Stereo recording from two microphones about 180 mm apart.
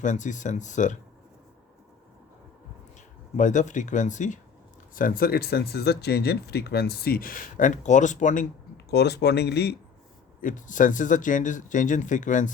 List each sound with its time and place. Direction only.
0.0 s speech: 45° left (ahead or behind)
3.3 s speech: 45° left (ahead or behind)
8.9 s speech: 65° left (ahead or behind)
10.4 s speech: 45° left (ahead or behind)